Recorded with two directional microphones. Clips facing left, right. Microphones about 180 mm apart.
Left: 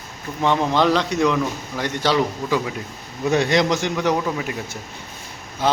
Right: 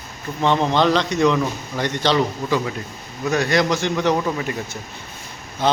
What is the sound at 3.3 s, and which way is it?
A man's voice, 25° left (ahead or behind).